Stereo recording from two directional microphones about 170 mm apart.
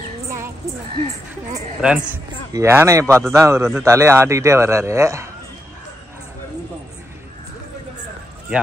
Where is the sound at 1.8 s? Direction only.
5° right (ahead or behind).